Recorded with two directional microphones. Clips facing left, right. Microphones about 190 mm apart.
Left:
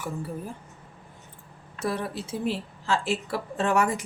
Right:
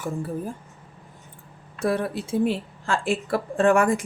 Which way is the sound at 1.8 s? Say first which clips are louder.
Right 5 dB; 55° right (ahead or behind).